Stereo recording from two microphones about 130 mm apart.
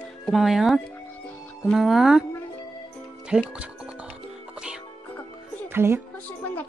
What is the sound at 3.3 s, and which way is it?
Speech, 5° right (ahead or behind).